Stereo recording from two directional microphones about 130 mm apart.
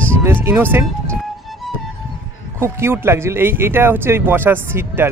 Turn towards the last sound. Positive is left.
turn(degrees=-15)  # may be behind; listen again after turning